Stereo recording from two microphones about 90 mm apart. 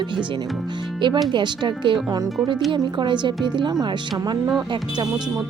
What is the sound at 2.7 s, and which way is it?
Speech, 60° right (ahead or behind).